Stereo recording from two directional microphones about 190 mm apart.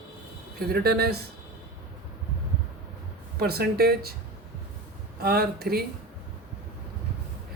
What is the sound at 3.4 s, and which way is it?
Speech, 55° right (ahead or behind).